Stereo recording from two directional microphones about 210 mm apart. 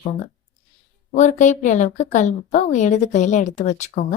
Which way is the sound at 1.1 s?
35° left (ahead or behind).